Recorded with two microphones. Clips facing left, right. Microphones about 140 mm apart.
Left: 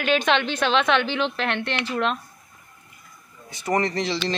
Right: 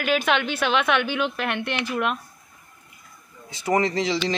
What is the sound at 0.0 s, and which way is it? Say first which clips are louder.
A woman's voice: left 1 dB; 5° right (ahead or behind).